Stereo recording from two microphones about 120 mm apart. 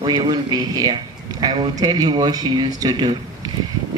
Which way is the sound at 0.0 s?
35° right (ahead or behind).